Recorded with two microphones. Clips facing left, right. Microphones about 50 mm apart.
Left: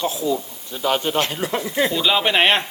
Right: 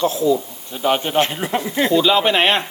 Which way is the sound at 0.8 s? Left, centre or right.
Right.